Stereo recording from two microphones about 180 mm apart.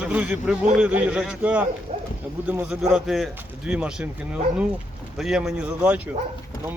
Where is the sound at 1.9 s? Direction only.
35° right (ahead or behind).